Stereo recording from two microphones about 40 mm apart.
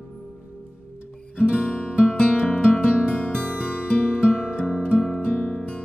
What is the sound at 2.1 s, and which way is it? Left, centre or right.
Music, left.